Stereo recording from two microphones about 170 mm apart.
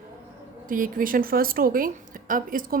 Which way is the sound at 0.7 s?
55° right (ahead or behind).